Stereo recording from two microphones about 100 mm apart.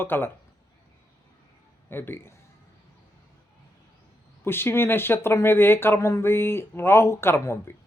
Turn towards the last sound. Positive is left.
turn(degrees=25)  # may be behind; listen again after turning